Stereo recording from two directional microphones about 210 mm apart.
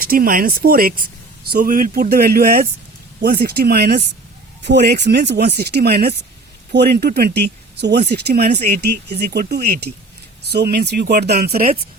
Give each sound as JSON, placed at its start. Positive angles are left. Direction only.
{"t": 0.0, "sound": "speech", "side_deg": -45}